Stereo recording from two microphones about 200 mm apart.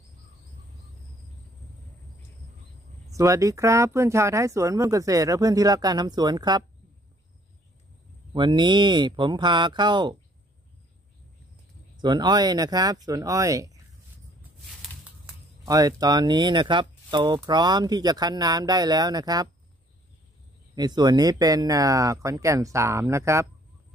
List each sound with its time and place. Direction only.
3.1 s speech: 15° right (ahead or behind)
8.3 s speech: 25° right (ahead or behind)
12.0 s speech: 20° right (ahead or behind)
14.8 s a sound: 5° right (ahead or behind)
15.7 s speech: 20° right (ahead or behind)
20.7 s speech: 20° right (ahead or behind)